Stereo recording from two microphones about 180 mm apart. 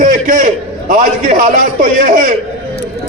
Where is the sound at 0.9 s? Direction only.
45° right (ahead or behind).